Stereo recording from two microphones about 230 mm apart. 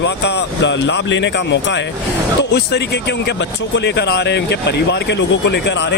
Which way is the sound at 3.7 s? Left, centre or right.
Left.